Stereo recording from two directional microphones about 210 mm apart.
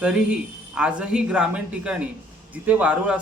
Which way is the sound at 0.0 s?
5° right (ahead or behind).